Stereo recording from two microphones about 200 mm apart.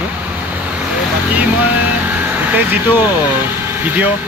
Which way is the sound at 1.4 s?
5° right (ahead or behind).